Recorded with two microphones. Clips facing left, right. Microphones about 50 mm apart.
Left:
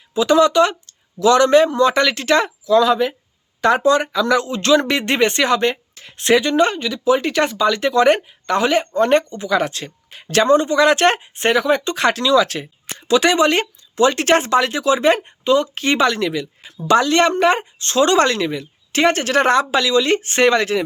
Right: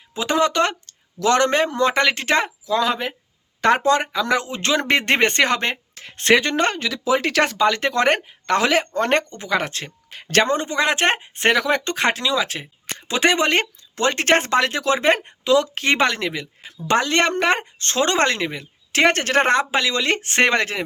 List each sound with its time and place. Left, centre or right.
0.1 s speech: right
6.7 s speech: right
7.6 s speech: right
8.5 s speech: right
9.0 s speech: right
11.3 s speech: right
11.9 s speech: right
15.4 s speech: right
15.7 s speech: right
18.9 s speech: right
19.9 s speech: right